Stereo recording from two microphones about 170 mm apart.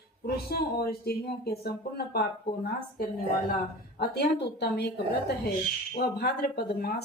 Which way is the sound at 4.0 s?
75° left (ahead or behind).